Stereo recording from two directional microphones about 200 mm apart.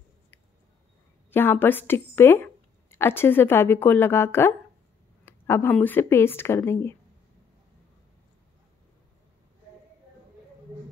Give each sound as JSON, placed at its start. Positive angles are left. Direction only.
{"t": 1.3, "sound": "a woman's voice", "side_deg": 10}